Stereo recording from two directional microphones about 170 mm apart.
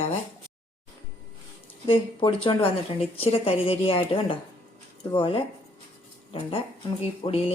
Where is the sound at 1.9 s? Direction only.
30° left (ahead or behind).